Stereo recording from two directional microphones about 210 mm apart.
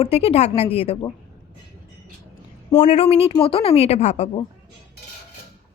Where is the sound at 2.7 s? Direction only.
35° left (ahead or behind).